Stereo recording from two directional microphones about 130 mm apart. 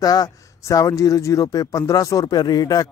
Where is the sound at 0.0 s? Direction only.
30° left (ahead or behind).